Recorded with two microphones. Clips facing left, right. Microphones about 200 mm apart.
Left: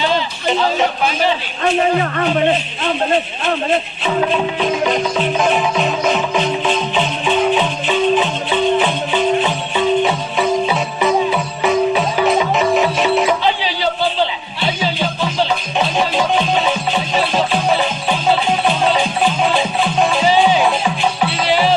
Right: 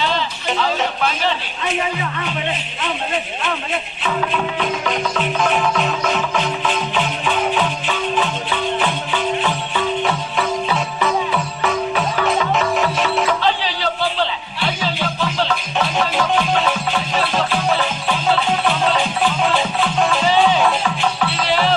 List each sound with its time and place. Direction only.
1.6 s a man's voice: 55° left (ahead or behind)
5.4 s music: 10° left (ahead or behind)
6.7 s music: 25° left (ahead or behind)
14.6 s music: 25° left (ahead or behind)
21.4 s music: 5° left (ahead or behind)